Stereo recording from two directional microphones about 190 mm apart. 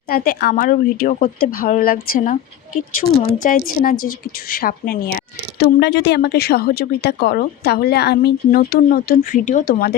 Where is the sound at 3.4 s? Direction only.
45° left (ahead or behind).